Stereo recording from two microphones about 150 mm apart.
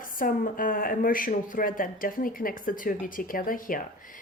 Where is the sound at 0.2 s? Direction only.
70° left (ahead or behind).